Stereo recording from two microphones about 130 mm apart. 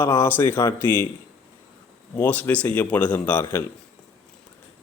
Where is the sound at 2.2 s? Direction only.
10° left (ahead or behind).